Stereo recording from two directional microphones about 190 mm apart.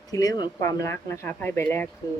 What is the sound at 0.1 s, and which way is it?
Speech, 20° left (ahead or behind).